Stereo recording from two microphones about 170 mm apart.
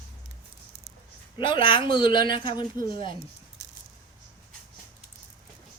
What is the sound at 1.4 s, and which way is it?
Speech, 30° left (ahead or behind).